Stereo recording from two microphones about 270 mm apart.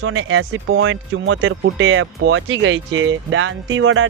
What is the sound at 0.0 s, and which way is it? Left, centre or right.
Speech, right.